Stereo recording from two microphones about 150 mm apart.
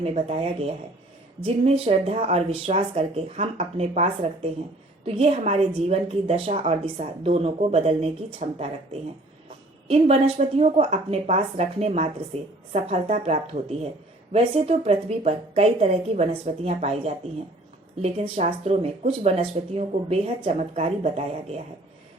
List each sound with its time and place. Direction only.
0.0 s a woman's voice: 45° right (ahead or behind)